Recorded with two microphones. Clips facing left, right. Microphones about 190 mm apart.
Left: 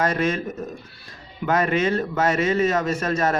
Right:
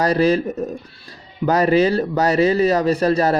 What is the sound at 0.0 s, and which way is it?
Speech, 35° right (ahead or behind).